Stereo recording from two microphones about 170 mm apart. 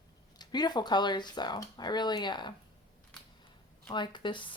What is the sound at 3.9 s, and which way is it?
Speech, 25° left (ahead or behind).